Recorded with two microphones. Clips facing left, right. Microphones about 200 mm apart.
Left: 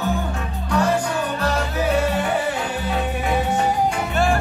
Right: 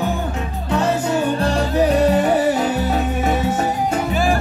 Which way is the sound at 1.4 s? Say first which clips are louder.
Right 3 dB; 35° right (ahead or behind).